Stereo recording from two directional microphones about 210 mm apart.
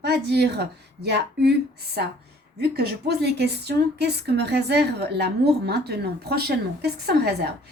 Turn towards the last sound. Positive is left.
turn(degrees=-50)  # may be behind; listen again after turning